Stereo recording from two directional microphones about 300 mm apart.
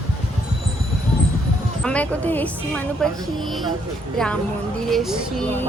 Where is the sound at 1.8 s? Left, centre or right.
Centre.